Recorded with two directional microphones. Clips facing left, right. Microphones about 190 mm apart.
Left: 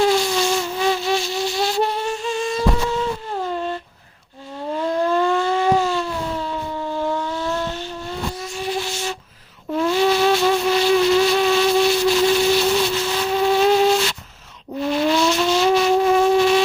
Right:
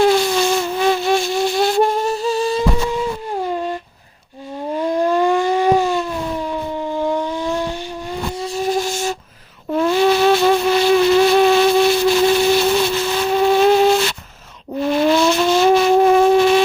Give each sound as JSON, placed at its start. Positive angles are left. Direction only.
{"t": 0.0, "sound": "a sound", "side_deg": -60}
{"t": 3.0, "sound": "humming", "side_deg": -15}
{"t": 4.8, "sound": "siren", "side_deg": -15}
{"t": 8.4, "sound": "flute", "side_deg": -35}
{"t": 9.7, "sound": "a sound", "side_deg": -55}
{"t": 14.8, "sound": "vehicle", "side_deg": -55}